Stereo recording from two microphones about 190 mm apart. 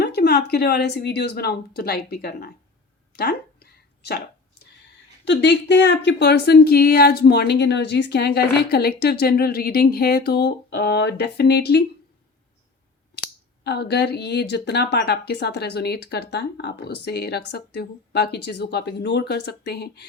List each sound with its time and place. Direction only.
0.0 s speech: 60° left (ahead or behind)
3.2 s a sound: 55° left (ahead or behind)
5.2 s speech: 65° left (ahead or behind)
13.7 s speech: 60° left (ahead or behind)